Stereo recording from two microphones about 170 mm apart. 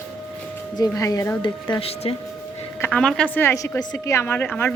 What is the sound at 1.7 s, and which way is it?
Speech, 35° left (ahead or behind).